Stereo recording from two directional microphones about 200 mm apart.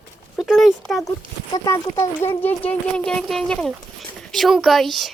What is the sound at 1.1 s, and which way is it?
Speech, 15° left (ahead or behind).